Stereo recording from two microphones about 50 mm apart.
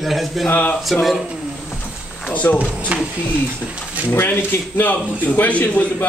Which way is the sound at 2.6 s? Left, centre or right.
Right.